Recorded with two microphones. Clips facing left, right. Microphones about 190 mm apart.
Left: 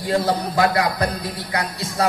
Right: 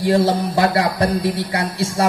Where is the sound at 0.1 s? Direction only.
30° right (ahead or behind).